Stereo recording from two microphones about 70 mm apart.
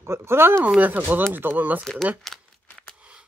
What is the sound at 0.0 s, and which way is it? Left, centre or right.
Speech, right.